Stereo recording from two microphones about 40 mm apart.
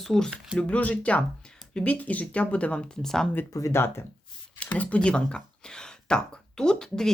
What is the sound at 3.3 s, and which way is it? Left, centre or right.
Speech, left.